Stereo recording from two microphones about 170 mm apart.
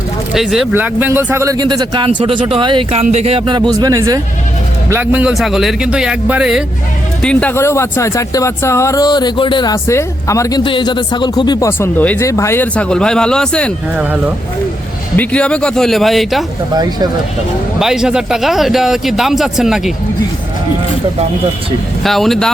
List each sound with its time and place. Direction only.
0.3 s a man's voice: centre (ahead or behind)
7.2 s speech: 5° left (ahead or behind)
13.9 s speech: 10° right (ahead or behind)
15.1 s speech: 10° left (ahead or behind)
16.7 s a man's voice: 25° right (ahead or behind)
17.7 s speech: 5° right (ahead or behind)
22.0 s speech: centre (ahead or behind)